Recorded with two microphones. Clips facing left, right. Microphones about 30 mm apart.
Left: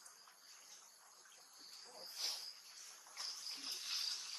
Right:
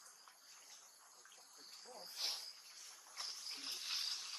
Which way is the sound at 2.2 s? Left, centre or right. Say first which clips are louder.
Right 1 dB; right.